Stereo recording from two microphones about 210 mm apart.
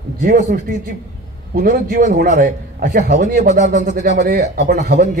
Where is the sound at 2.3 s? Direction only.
55° right (ahead or behind).